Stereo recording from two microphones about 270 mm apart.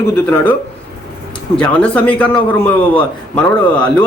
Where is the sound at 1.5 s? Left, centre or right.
Centre.